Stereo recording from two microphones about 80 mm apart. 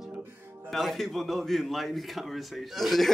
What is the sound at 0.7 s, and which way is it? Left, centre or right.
A man's voice, centre.